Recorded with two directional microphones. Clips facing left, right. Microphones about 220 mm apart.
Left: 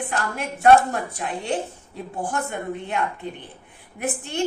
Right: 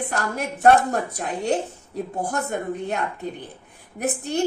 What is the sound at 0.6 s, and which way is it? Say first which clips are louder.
A woman's voice: left 1 dB; 40° right (ahead or behind).